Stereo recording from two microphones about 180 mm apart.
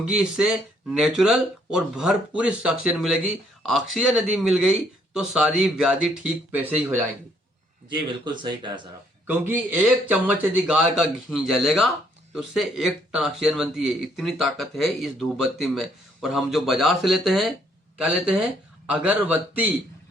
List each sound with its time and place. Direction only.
0.0 s speech: 5° right (ahead or behind)
7.9 s speech: 25° right (ahead or behind)
9.2 s a man's voice: 10° right (ahead or behind)